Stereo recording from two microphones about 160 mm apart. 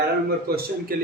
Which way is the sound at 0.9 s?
65° right (ahead or behind).